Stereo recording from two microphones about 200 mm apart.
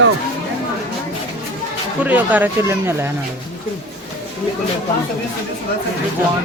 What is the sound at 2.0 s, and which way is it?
Speech, 10° right (ahead or behind).